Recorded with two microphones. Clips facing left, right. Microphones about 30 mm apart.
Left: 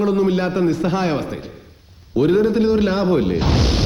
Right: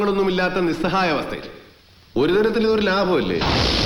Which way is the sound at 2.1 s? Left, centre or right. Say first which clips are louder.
Left 2 dB; right.